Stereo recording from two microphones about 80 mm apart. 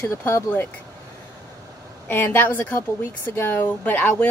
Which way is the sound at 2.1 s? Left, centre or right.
Left.